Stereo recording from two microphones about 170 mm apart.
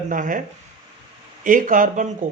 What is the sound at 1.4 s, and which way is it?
Speech, 50° right (ahead or behind).